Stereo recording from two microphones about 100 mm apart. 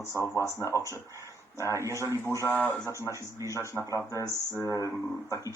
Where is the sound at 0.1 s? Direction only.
30° left (ahead or behind).